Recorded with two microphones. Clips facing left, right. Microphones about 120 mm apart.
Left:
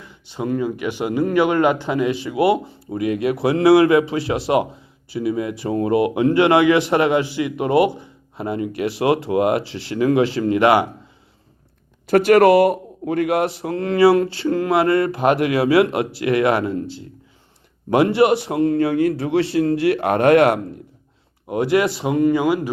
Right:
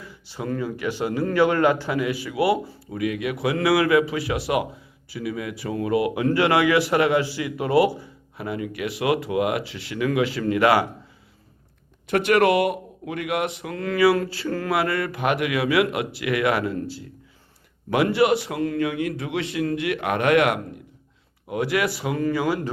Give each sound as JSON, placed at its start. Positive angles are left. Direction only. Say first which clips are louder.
{"t": 0.0, "sound": "speech", "louder": "left 5 dB", "side_deg": 20}
{"t": 12.0, "sound": "speech", "louder": "left 6 dB", "side_deg": 40}